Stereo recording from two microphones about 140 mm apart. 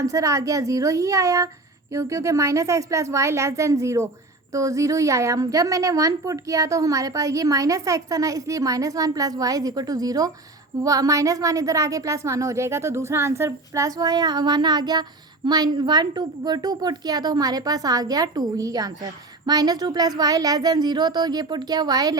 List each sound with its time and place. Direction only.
0.0 s a woman's voice: 20° right (ahead or behind)